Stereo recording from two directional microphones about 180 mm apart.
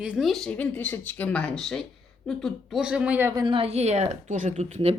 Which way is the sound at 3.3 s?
25° right (ahead or behind).